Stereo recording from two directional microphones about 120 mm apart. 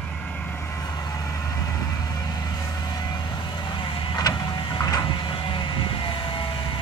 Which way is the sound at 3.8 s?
40° left (ahead or behind).